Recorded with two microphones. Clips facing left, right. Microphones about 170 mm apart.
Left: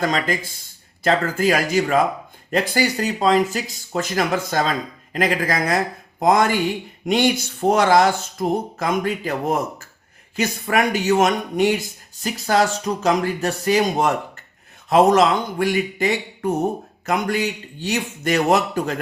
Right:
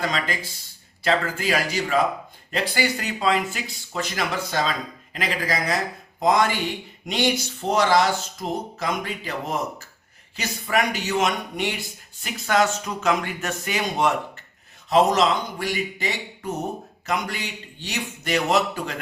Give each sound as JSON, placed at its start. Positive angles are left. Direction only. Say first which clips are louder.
{"t": 0.0, "sound": "speech", "louder": "left 5 dB", "side_deg": 45}
{"t": 14.8, "sound": "speech", "louder": "left 4 dB", "side_deg": 55}